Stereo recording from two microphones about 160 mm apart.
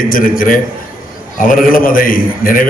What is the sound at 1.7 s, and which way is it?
Speech, 60° left (ahead or behind).